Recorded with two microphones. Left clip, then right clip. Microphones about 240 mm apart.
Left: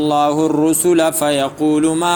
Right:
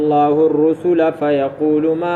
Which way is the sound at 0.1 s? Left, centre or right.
Left.